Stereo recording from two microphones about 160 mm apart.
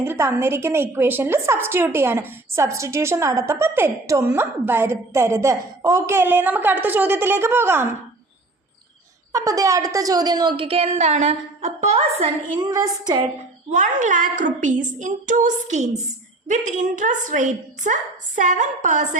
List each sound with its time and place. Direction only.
0.0 s a woman's voice: 15° right (ahead or behind)
9.3 s a woman's voice: 20° right (ahead or behind); by 12.3 s 40° right (ahead or behind)
12.5 s a woman's voice: 25° right (ahead or behind)
13.7 s a woman's voice: 50° right (ahead or behind)